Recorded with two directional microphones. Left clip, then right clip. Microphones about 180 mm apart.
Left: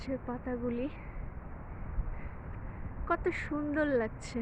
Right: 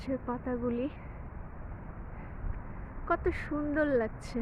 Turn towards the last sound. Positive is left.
turn(degrees=-10)  # may be behind; listen again after turning